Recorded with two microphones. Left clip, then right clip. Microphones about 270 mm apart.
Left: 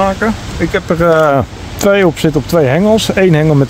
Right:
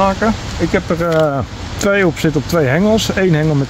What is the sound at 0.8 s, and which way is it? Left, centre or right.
Speech, left.